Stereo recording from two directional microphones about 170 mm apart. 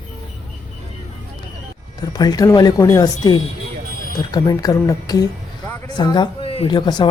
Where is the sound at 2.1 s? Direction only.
20° left (ahead or behind).